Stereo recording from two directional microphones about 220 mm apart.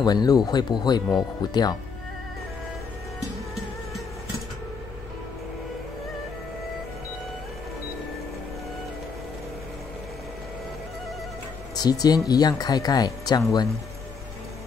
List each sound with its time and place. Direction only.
0.0 s speech: 20° left (ahead or behind)
11.7 s speech: 15° left (ahead or behind)